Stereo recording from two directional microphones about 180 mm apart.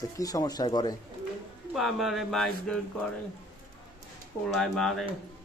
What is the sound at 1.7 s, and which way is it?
Speech, centre (ahead or behind).